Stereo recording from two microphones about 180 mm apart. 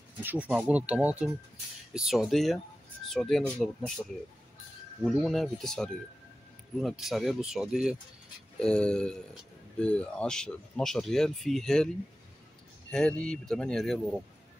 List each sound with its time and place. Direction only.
0.2 s speech: 10° right (ahead or behind)
8.5 s speech: 5° left (ahead or behind)
12.9 s speech: 5° left (ahead or behind)